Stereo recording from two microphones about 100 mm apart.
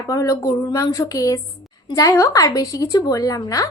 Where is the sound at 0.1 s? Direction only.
30° left (ahead or behind).